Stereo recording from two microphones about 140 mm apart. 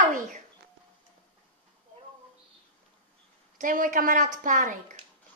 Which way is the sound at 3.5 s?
70° right (ahead or behind).